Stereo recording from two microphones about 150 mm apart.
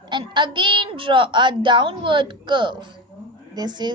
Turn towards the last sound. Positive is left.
turn(degrees=-30)  # may be behind; listen again after turning